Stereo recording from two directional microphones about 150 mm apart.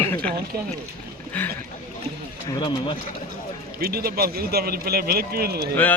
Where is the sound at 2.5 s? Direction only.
30° left (ahead or behind).